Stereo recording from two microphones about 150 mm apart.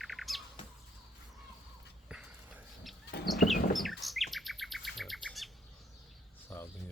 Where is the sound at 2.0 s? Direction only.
5° right (ahead or behind).